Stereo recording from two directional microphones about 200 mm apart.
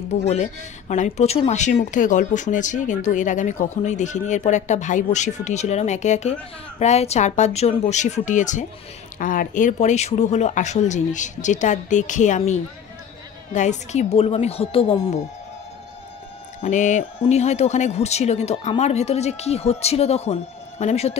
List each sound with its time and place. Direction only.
0.3 s speech: 35° left (ahead or behind)
16.6 s speech: 35° left (ahead or behind)